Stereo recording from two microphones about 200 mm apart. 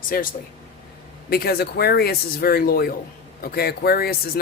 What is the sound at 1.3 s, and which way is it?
Speech, 50° left (ahead or behind).